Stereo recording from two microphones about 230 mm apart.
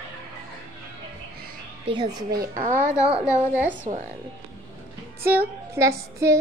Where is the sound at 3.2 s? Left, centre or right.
Centre.